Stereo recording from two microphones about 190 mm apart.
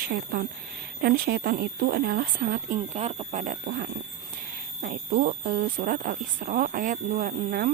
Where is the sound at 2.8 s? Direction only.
30° right (ahead or behind).